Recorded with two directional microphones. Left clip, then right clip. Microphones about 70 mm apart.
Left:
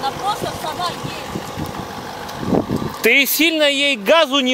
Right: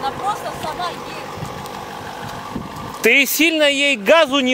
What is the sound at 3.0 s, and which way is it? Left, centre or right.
Speech, right.